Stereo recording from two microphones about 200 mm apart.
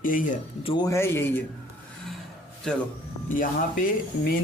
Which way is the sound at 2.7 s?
5° left (ahead or behind).